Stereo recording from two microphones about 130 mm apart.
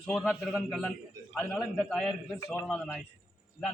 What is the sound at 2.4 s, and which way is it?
Speech, 15° left (ahead or behind).